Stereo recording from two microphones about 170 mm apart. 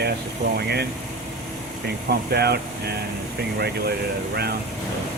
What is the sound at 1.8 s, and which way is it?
Speech, 70° right (ahead or behind).